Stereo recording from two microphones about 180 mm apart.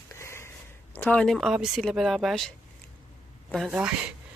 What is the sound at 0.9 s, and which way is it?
Speech, 5° left (ahead or behind).